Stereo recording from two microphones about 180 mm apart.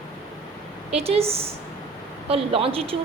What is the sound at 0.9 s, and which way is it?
Speech, 35° right (ahead or behind).